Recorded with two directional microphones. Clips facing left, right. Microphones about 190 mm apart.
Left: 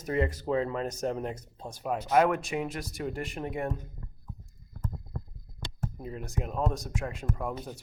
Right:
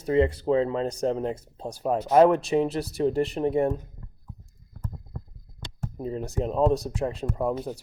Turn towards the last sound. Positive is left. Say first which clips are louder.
# right 7 dB
turn(degrees=-30)  # may be behind; listen again after turning